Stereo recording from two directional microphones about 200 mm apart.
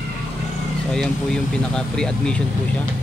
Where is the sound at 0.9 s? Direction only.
5° left (ahead or behind).